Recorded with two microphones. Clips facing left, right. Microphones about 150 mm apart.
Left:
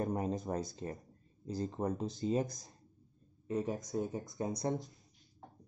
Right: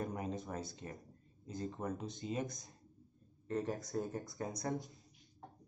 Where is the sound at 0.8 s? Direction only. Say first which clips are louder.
Left 6 dB; 35° left (ahead or behind).